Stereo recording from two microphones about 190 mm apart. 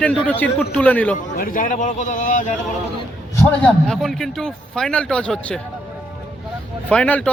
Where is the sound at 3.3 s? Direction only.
10° left (ahead or behind).